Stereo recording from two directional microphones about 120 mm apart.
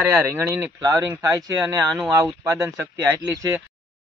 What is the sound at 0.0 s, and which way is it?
Speech, 20° right (ahead or behind).